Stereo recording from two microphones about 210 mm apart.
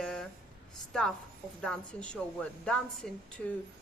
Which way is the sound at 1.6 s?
5° left (ahead or behind).